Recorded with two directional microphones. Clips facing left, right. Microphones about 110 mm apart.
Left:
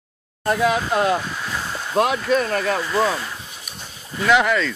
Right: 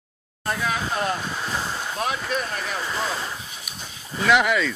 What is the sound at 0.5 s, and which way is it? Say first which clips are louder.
Speech: left 7 dB; 75° left (ahead or behind).